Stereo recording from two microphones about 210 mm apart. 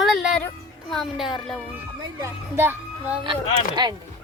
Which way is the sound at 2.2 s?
10° right (ahead or behind).